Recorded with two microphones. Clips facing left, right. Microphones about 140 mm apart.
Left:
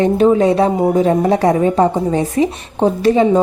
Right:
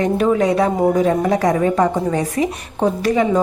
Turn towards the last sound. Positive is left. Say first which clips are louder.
# left 4 dB
turn(degrees=25)  # may be behind; listen again after turning